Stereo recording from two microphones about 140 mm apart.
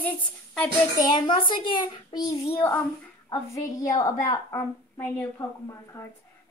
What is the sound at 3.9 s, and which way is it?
A woman's voice, 25° left (ahead or behind).